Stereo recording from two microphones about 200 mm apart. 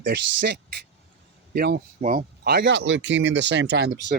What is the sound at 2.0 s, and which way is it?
Speech, 40° right (ahead or behind).